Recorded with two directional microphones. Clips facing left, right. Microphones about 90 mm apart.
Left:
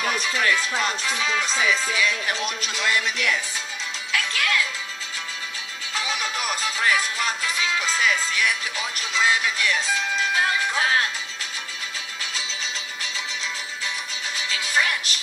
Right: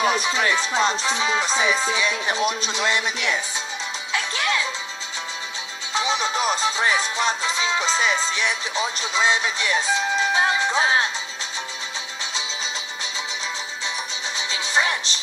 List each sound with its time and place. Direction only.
0.0 s music: 25° right (ahead or behind)
5.9 s music: 25° right (ahead or behind)
14.5 s music: 25° right (ahead or behind)